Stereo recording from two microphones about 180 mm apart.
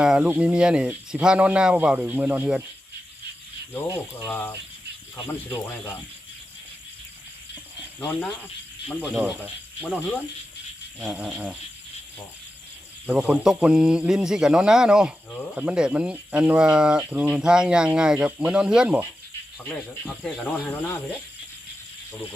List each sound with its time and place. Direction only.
0.0 s speech: 5° right (ahead or behind)
4.2 s speech: 15° left (ahead or behind)
7.9 s speech: 10° left (ahead or behind)
9.0 s speech: 5° right (ahead or behind)
11.0 s speech: 5° right (ahead or behind)
13.1 s speech: 5° right (ahead or behind); by 21.0 s 10° left (ahead or behind)